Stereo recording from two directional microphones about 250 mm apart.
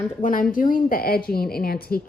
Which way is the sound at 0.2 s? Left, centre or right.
Left.